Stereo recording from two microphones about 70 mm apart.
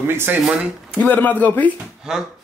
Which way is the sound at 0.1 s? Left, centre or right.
Right.